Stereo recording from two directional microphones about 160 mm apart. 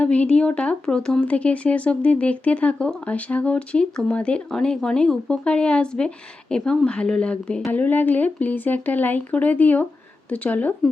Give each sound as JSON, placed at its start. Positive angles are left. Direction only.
{"t": 0.0, "sound": "speech", "side_deg": 10}